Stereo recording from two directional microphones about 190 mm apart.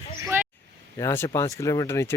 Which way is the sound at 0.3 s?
10° right (ahead or behind).